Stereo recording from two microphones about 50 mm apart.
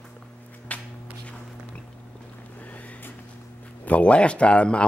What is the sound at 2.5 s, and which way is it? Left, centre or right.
Boat, left.